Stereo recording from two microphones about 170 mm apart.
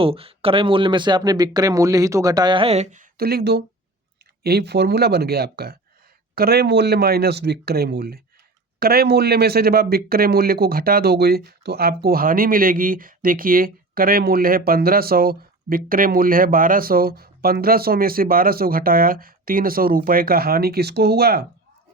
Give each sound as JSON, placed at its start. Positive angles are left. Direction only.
{"t": 0.0, "sound": "speech", "side_deg": -35}
{"t": 3.2, "sound": "speech", "side_deg": -65}